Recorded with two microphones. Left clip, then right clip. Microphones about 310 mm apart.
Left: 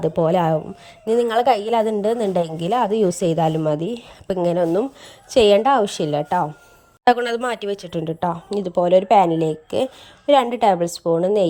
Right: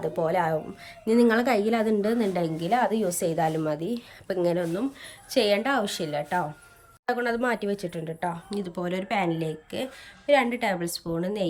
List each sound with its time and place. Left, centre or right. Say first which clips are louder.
0.0 s a woman's voice: left 7 dB; left